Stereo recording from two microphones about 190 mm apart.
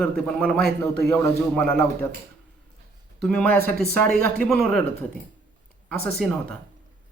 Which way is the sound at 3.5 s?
50° right (ahead or behind).